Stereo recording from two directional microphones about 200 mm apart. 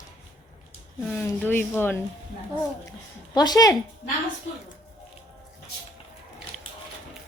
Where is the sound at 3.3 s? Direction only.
20° left (ahead or behind).